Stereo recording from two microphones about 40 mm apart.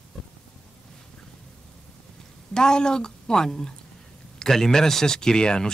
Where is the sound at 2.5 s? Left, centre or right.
Centre.